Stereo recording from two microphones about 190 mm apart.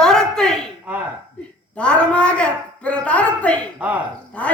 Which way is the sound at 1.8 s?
5° left (ahead or behind).